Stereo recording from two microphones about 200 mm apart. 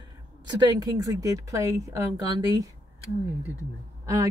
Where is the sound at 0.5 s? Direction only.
20° right (ahead or behind).